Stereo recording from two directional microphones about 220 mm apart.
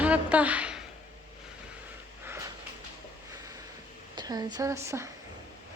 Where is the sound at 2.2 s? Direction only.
10° right (ahead or behind).